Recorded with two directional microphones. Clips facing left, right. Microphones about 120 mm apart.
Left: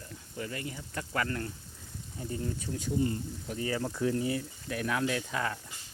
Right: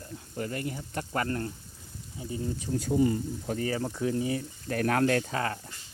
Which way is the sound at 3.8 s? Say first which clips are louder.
Right 1 dB; 20° right (ahead or behind).